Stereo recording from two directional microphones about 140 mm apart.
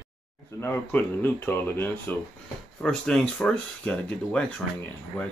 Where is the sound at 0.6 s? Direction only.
15° left (ahead or behind).